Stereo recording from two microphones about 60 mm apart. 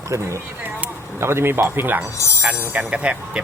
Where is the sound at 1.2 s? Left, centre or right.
Right.